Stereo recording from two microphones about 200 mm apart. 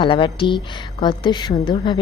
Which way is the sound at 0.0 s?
25° left (ahead or behind).